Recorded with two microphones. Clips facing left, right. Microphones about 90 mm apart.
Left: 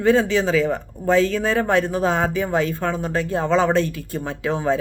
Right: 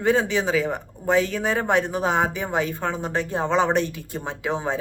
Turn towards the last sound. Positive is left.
turn(degrees=-20)  # may be behind; listen again after turning